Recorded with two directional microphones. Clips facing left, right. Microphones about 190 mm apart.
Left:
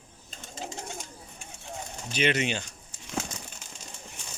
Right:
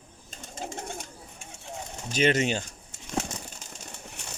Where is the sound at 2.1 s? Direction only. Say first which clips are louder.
Right 3 dB; 45° right (ahead or behind).